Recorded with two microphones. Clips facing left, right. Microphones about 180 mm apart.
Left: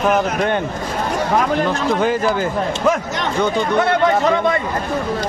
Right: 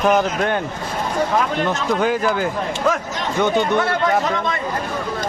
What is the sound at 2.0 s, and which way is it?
Speech, centre (ahead or behind).